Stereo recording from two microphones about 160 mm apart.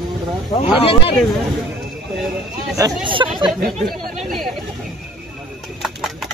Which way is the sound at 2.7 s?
20° right (ahead or behind).